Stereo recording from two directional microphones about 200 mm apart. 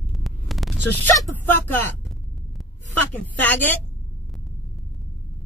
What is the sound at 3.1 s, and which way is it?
Speech, 10° left (ahead or behind).